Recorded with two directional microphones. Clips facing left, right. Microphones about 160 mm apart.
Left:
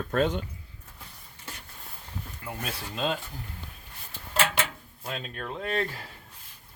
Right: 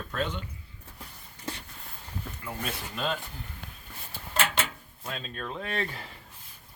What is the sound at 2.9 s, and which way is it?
Speech, 20° left (ahead or behind).